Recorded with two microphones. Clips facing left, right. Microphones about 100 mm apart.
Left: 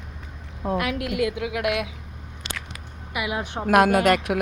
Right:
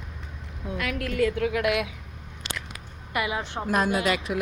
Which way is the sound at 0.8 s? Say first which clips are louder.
Even; 20° left (ahead or behind).